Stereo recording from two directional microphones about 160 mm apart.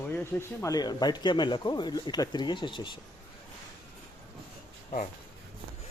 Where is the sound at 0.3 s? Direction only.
20° left (ahead or behind).